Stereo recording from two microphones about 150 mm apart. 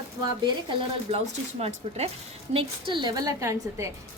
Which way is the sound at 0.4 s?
40° right (ahead or behind).